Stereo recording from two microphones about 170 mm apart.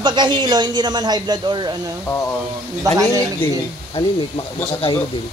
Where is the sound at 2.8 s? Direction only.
20° right (ahead or behind).